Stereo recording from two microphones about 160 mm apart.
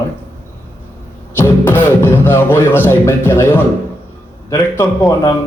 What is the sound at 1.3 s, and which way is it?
A man's voice, 15° left (ahead or behind).